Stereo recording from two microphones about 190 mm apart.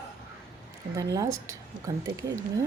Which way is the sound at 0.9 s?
20° right (ahead or behind).